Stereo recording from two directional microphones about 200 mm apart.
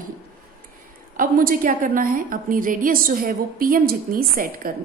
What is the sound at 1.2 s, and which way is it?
A woman's voice, 45° right (ahead or behind).